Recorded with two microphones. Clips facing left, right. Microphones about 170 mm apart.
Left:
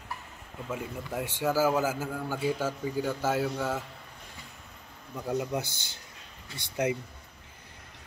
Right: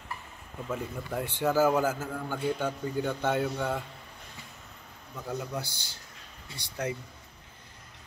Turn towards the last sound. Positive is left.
turn(degrees=20)  # may be behind; listen again after turning